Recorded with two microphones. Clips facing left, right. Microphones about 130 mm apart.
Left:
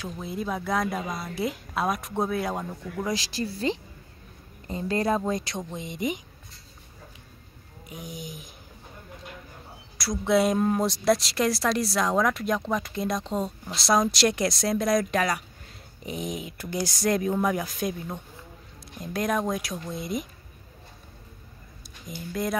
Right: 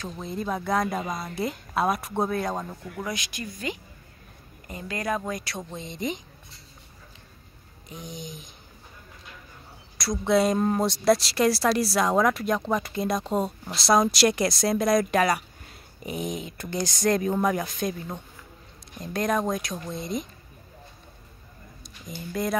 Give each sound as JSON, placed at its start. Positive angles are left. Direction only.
{"t": 0.0, "sound": "a woman's voice", "side_deg": 5}
{"t": 3.0, "sound": "speech", "side_deg": 25}
{"t": 7.9, "sound": "speech", "side_deg": 5}
{"t": 9.9, "sound": "a woman's voice", "side_deg": 0}
{"t": 22.0, "sound": "a woman's voice", "side_deg": 0}